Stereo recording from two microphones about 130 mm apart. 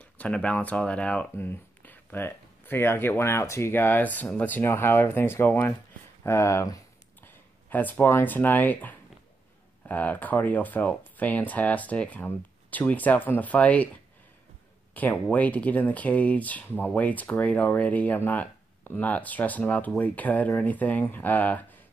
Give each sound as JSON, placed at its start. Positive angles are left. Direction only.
{"t": 0.0, "sound": "speech", "side_deg": 10}
{"t": 15.0, "sound": "speech", "side_deg": 10}